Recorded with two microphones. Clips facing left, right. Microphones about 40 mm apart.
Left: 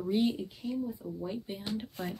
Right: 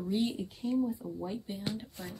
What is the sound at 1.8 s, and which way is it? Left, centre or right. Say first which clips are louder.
Speech: left 6 dB; left.